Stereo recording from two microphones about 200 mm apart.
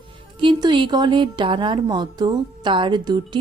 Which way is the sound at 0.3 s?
25° right (ahead or behind).